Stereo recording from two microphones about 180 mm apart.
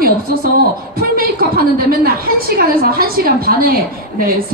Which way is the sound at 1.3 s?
55° right (ahead or behind).